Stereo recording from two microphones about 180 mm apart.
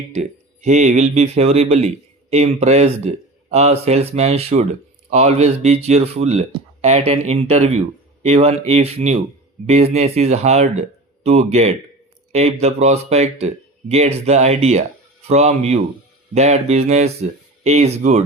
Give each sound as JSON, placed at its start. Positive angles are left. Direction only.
{"t": 0.1, "sound": "speech", "side_deg": -40}